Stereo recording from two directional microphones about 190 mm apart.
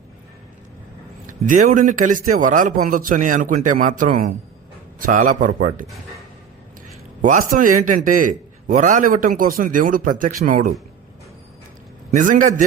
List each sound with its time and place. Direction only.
1.3 s a man's voice: 45° right (ahead or behind)
7.2 s a man's voice: 45° right (ahead or behind)
12.1 s a man's voice: 45° right (ahead or behind)